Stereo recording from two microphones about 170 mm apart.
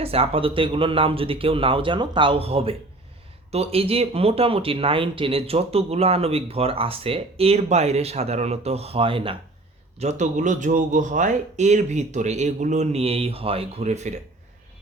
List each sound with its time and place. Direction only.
0.0 s speech: 35° right (ahead or behind)
10.0 s speech: 45° right (ahead or behind)